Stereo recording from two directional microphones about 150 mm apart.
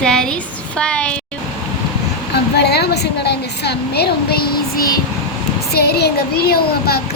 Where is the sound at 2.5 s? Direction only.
90° left.